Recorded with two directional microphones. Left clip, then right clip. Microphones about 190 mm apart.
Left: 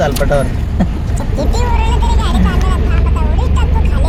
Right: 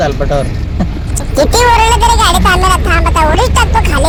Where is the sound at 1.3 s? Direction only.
60° right (ahead or behind).